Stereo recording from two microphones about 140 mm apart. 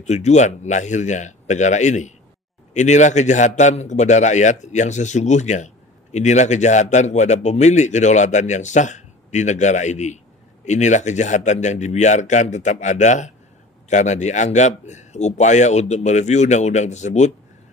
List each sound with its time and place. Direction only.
0.0 s a man's voice: 55° left (ahead or behind)